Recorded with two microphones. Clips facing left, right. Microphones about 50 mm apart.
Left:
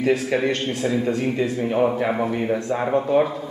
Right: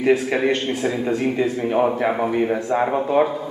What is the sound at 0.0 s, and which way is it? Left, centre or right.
A man's voice, centre.